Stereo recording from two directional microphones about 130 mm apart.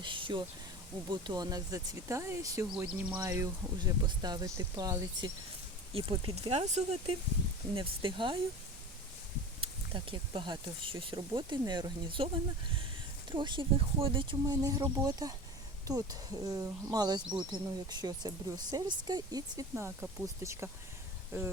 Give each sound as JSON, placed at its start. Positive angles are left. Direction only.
{"t": 0.0, "sound": "a sound", "side_deg": -40}
{"t": 1.1, "sound": "speech", "side_deg": -30}
{"t": 2.6, "sound": "speech", "side_deg": -10}
{"t": 3.2, "sound": "speech", "side_deg": -25}
{"t": 5.9, "sound": "speech", "side_deg": -45}
{"t": 7.8, "sound": "speech", "side_deg": -40}
{"t": 9.6, "sound": "speech", "side_deg": -45}
{"t": 13.3, "sound": "speech", "side_deg": -40}
{"t": 14.4, "sound": "speech", "side_deg": -30}